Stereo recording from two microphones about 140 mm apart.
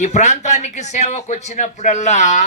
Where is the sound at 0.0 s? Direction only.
55° left (ahead or behind).